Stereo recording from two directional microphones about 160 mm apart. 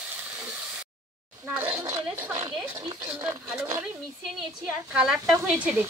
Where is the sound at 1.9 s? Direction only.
15° right (ahead or behind).